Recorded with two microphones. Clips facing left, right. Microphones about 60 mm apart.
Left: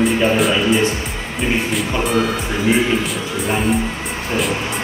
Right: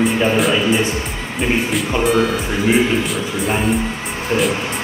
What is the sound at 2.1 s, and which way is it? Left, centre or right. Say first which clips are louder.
A man's voice: right 3 dB; centre.